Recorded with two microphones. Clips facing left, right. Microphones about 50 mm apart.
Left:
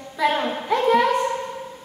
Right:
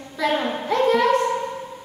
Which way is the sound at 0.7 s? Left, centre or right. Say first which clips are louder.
Even; centre.